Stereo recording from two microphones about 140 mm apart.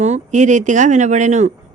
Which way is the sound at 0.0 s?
55° right (ahead or behind).